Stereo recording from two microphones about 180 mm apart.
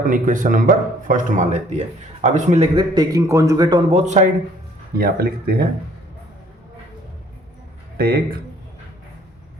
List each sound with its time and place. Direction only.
0.0 s a man's voice: 50° right (ahead or behind)
2.9 s a man's voice: 20° right (ahead or behind)
4.0 s a man's voice: 40° right (ahead or behind)
4.9 s speech: 55° right (ahead or behind)
7.9 s speech: 55° right (ahead or behind)